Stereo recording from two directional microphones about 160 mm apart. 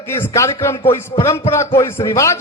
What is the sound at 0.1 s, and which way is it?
A man's voice, 15° left (ahead or behind).